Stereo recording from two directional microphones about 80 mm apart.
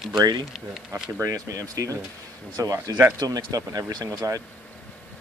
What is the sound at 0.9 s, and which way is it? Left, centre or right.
Speech, right.